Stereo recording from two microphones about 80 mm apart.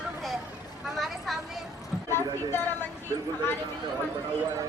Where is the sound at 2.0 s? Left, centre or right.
Left.